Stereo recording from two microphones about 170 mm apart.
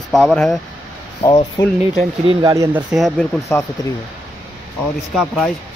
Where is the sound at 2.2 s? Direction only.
20° right (ahead or behind).